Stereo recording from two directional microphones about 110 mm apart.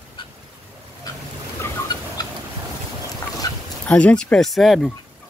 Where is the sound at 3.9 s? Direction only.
10° left (ahead or behind).